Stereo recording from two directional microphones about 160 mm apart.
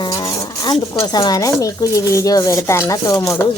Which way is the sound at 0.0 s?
20° left (ahead or behind).